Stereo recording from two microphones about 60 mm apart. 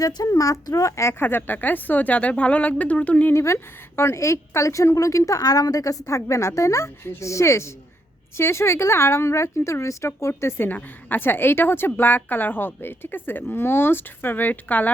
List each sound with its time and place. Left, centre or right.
0.3 s a woman's voice: left
1.2 s speech: left
3.3 s a woman's voice: left
10.7 s speech: left